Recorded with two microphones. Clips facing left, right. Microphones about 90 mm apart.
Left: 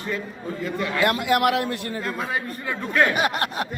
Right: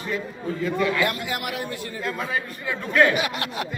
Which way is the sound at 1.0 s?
90° left.